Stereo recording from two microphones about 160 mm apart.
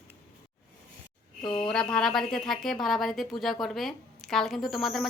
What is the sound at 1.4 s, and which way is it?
Speech, 30° left (ahead or behind).